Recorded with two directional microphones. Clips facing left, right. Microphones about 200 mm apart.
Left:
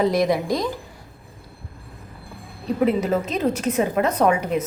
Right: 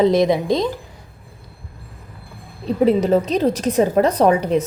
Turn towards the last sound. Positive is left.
turn(degrees=-35)  # may be behind; listen again after turning